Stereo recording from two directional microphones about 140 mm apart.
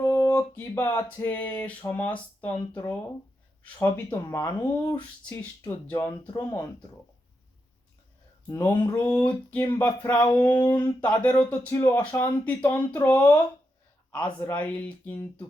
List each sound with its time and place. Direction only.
0.0 s a sound: 25° left (ahead or behind)
0.5 s speech: 15° left (ahead or behind)
8.4 s speech: 15° left (ahead or behind)
11.7 s speech: 20° left (ahead or behind)
14.1 s speech: 10° left (ahead or behind)